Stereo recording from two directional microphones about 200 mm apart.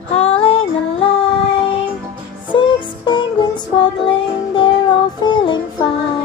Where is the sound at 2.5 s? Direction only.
25° left (ahead or behind).